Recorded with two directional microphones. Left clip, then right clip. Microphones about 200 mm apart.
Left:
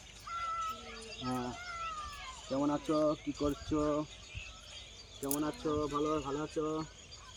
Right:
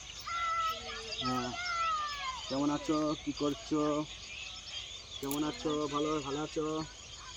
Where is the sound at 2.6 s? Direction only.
20° right (ahead or behind).